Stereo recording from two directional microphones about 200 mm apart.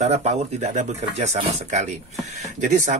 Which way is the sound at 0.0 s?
30° right (ahead or behind).